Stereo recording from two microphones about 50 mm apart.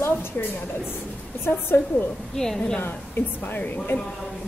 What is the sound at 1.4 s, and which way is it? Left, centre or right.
Speech, left.